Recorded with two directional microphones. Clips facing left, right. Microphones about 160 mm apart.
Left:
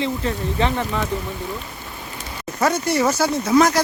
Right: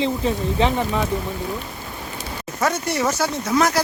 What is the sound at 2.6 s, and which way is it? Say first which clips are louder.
Speech: left 3 dB; centre (ahead or behind).